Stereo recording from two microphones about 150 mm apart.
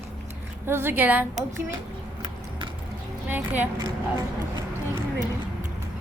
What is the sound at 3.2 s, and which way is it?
Speech, 10° right (ahead or behind).